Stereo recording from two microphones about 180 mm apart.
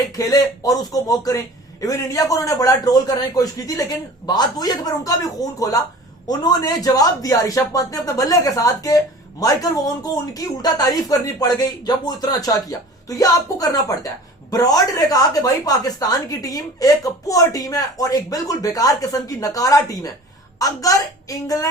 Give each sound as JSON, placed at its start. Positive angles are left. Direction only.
{"t": 0.2, "sound": "a man's voice", "side_deg": 20}